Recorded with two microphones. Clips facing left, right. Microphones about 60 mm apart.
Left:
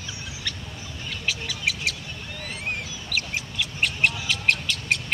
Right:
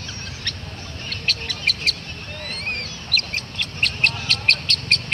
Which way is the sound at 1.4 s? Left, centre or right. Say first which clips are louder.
Right 1 dB; right.